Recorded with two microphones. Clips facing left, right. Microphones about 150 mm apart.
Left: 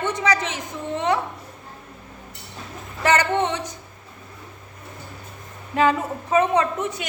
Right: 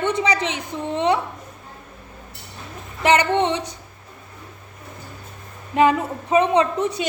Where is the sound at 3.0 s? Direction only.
15° right (ahead or behind).